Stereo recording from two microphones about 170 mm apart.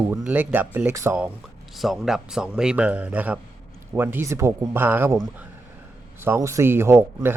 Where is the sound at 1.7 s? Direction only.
Centre (ahead or behind).